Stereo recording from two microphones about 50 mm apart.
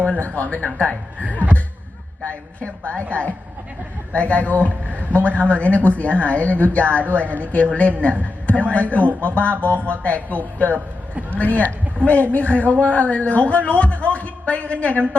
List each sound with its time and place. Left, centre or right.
0.0 s a man's voice: left
8.2 s a sound: left
8.7 s a man's voice: left